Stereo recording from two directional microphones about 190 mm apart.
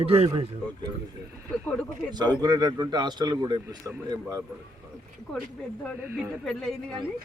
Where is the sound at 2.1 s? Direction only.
20° right (ahead or behind).